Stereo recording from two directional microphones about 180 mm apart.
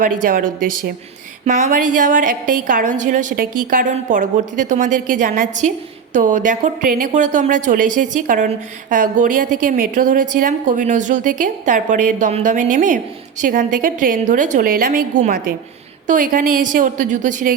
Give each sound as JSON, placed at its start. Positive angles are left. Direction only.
{"t": 0.0, "sound": "a woman's voice", "side_deg": -50}